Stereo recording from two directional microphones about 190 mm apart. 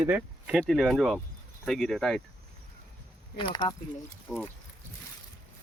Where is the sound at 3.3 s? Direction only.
25° left (ahead or behind).